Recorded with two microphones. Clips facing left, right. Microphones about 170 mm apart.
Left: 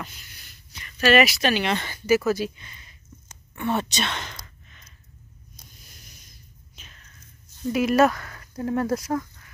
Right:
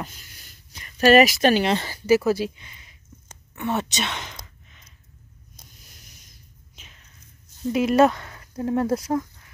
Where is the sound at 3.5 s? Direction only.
5° right (ahead or behind).